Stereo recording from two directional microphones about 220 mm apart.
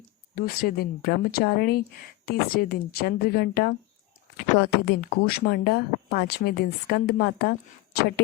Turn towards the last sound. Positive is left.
turn(degrees=45)  # may be behind; listen again after turning